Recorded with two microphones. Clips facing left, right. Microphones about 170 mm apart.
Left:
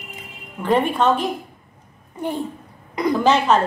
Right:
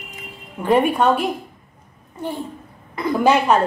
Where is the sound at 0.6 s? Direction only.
10° right (ahead or behind).